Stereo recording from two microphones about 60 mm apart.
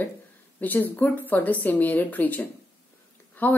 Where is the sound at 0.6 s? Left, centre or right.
Left.